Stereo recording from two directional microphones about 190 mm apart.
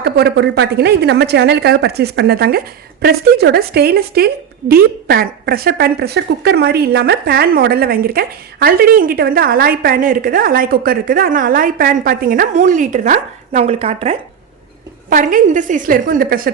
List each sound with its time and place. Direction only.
0.0 s a woman's voice: 60° right (ahead or behind); by 14.2 s 30° right (ahead or behind)
15.1 s speech: 45° right (ahead or behind)